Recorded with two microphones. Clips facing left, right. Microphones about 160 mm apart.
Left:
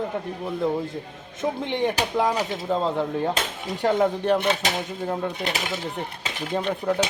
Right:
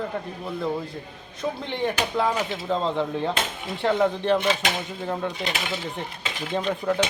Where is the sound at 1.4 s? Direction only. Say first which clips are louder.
Left 3 dB; 15° left (ahead or behind).